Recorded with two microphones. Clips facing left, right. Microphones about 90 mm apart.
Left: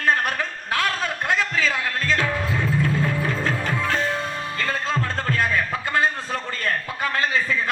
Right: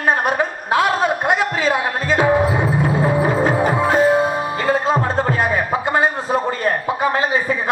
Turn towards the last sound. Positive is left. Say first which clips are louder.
# right 4 dB
turn(degrees=-20)  # may be behind; listen again after turning